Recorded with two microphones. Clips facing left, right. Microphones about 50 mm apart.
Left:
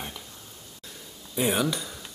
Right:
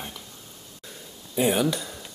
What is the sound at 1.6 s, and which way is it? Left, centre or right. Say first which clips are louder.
Speech: right 3 dB; centre.